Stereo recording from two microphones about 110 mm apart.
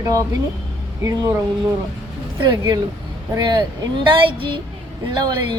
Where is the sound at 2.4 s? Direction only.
40° right (ahead or behind).